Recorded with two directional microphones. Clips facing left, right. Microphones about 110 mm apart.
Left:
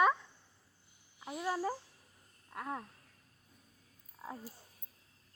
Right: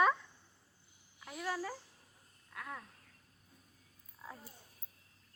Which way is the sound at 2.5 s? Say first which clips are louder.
Left 5 dB; 30° left (ahead or behind).